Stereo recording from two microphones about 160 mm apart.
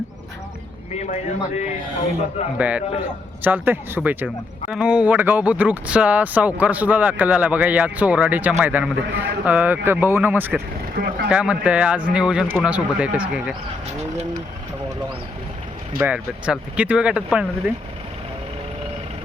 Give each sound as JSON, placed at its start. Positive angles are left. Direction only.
{"t": 0.9, "sound": "a man's voice", "side_deg": 45}
{"t": 2.6, "sound": "speech", "side_deg": -10}
{"t": 10.9, "sound": "speech", "side_deg": -70}
{"t": 11.3, "sound": "speech", "side_deg": -10}
{"t": 16.0, "sound": "speech", "side_deg": -5}